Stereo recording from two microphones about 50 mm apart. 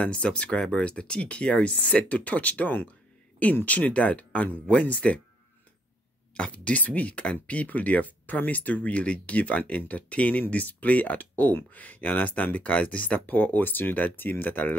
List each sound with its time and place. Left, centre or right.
0.0 s speech: left
6.3 s speech: left